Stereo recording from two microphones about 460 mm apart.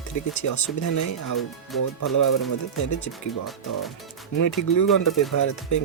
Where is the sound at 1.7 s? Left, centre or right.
Centre.